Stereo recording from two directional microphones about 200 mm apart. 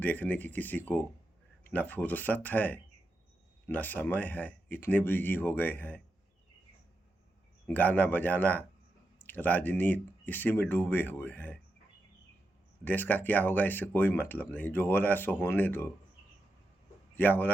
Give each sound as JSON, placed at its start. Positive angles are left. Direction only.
{"t": 0.0, "sound": "speech", "side_deg": 10}
{"t": 7.7, "sound": "speech", "side_deg": 10}
{"t": 12.8, "sound": "speech", "side_deg": 10}
{"t": 17.2, "sound": "speech", "side_deg": 10}